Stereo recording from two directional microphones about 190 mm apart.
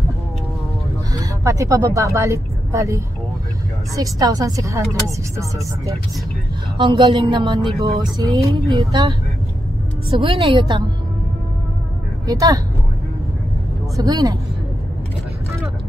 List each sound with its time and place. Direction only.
1.2 s speech: 15° right (ahead or behind)
6.8 s speech: 25° right (ahead or behind)
10.1 s speech: 30° right (ahead or behind)
12.3 s speech: 20° right (ahead or behind)
13.9 s speech: 20° right (ahead or behind)